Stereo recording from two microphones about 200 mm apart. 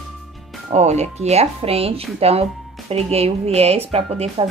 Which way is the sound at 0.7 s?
35° right (ahead or behind).